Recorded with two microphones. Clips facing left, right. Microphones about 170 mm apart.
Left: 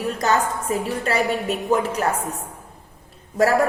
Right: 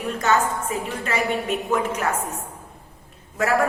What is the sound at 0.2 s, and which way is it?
Speech, 35° left (ahead or behind).